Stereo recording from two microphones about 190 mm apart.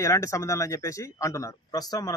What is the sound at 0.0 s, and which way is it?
A man's voice, 15° left (ahead or behind).